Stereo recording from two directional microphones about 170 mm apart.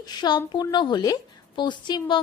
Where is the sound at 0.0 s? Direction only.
25° left (ahead or behind).